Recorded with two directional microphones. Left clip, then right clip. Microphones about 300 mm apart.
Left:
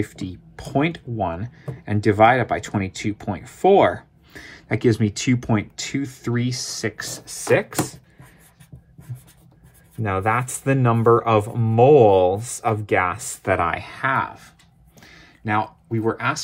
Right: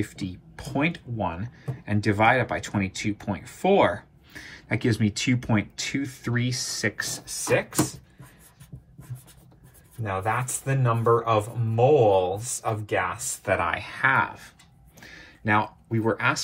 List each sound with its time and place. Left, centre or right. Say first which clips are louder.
0.0 s speech: left 4 dB; left
10.0 s speech: left 6 dB; left
15.0 s a sound: right 1 dB; centre